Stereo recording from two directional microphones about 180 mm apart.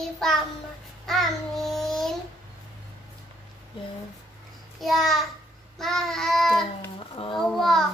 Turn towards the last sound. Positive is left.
turn(degrees=0)  # may be behind; listen again after turning